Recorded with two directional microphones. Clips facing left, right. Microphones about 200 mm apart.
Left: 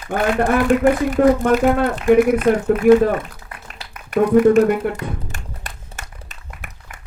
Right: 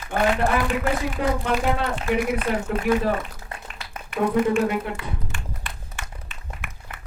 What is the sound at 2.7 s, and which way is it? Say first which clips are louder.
Speech: left 8 dB; 30° right (ahead or behind).